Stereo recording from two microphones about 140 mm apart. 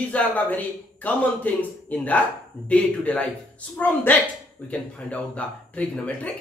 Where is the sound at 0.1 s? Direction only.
10° left (ahead or behind).